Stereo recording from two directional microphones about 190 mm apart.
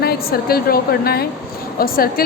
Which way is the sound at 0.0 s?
55° left (ahead or behind).